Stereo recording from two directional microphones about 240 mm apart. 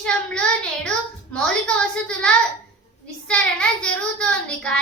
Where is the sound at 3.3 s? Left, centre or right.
Centre.